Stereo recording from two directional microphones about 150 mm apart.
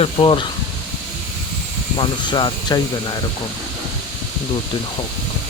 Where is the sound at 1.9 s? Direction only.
30° left (ahead or behind).